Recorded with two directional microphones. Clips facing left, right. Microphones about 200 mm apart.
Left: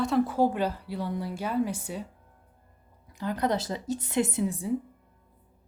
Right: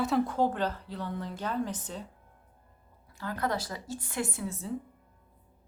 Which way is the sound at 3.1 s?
20° left (ahead or behind).